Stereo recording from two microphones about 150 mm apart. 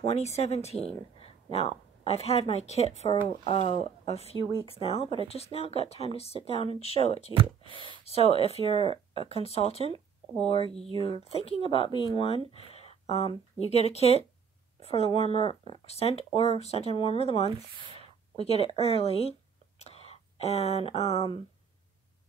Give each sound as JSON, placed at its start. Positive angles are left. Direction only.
{"t": 0.0, "sound": "speech", "side_deg": 45}
{"t": 7.3, "sound": "speech", "side_deg": -35}
{"t": 8.0, "sound": "speech", "side_deg": 40}
{"t": 11.0, "sound": "speech", "side_deg": 40}